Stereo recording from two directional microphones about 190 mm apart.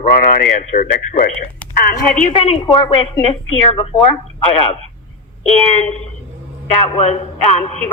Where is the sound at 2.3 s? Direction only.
30° left (ahead or behind).